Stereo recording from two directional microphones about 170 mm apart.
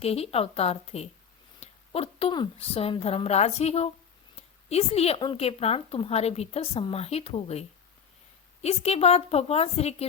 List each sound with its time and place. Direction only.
0.0 s speech: 35° left (ahead or behind)
8.6 s speech: 40° left (ahead or behind)